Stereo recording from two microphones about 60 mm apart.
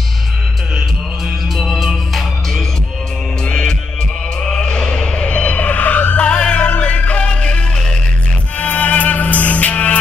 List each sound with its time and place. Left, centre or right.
1.6 s music: centre
3.4 s music: centre
4.5 s a sound: centre
6.2 s music: centre